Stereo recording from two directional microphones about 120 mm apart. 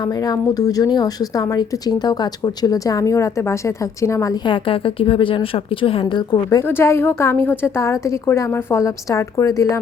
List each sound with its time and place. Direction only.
0.3 s a woman's voice: 30° left (ahead or behind)
4.4 s a woman's voice: 45° left (ahead or behind)
6.6 s a woman's voice: 20° left (ahead or behind)